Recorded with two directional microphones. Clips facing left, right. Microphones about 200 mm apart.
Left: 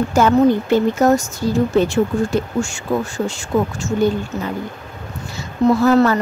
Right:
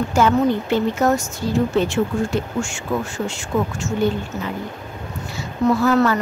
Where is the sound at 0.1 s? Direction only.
40° left (ahead or behind).